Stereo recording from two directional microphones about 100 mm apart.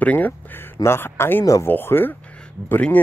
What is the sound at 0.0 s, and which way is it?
Speech, 15° left (ahead or behind).